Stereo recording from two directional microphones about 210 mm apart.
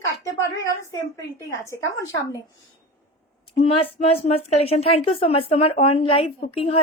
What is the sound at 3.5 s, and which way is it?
Speech, 30° left (ahead or behind).